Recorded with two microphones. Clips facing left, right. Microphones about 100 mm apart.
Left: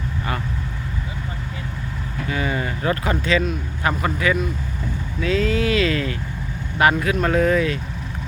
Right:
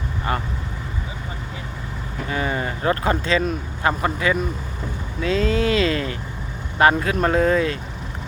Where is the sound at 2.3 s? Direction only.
30° right (ahead or behind).